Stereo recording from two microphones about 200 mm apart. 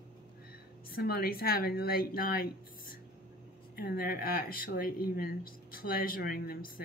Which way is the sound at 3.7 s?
50° left (ahead or behind).